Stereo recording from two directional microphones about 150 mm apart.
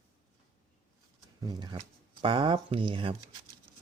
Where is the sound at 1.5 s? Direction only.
30° right (ahead or behind).